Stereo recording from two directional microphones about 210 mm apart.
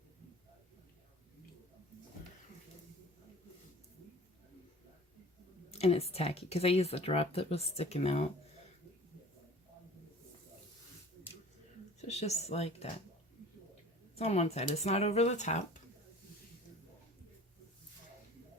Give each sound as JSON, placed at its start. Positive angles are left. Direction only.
{"t": 5.7, "sound": "speech", "side_deg": 30}
{"t": 11.9, "sound": "speech", "side_deg": 30}
{"t": 14.2, "sound": "speech", "side_deg": 30}